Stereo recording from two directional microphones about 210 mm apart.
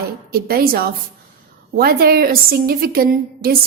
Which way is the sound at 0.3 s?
45° right (ahead or behind).